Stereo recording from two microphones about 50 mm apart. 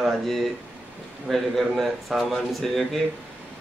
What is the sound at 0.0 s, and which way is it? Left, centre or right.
A man's voice, centre.